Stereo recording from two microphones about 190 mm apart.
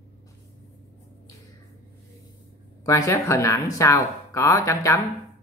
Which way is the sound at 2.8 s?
15° left (ahead or behind).